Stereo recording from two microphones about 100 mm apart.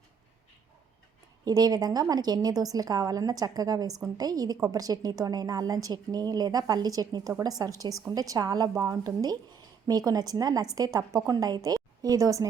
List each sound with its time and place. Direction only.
1.5 s a woman's voice: 40° right (ahead or behind)